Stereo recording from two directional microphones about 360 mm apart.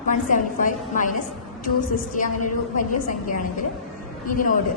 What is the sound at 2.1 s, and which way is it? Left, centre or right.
A woman's voice, left.